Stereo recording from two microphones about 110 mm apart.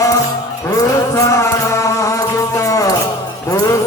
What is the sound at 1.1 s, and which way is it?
Music, 30° left (ahead or behind).